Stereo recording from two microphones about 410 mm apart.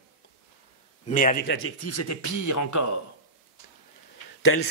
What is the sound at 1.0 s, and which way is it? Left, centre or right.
Speech, centre.